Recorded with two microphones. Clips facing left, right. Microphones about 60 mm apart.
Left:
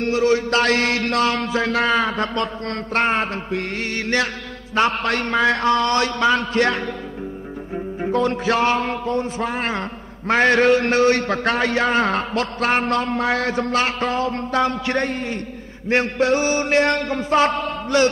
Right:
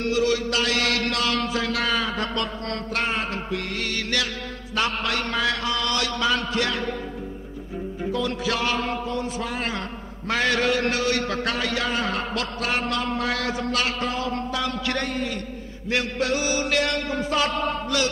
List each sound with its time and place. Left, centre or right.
0.0 s music: left